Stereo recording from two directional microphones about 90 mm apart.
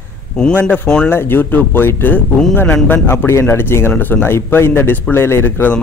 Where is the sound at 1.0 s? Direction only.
25° left (ahead or behind).